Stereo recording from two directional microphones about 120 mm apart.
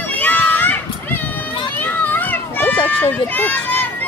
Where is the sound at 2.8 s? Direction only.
15° left (ahead or behind).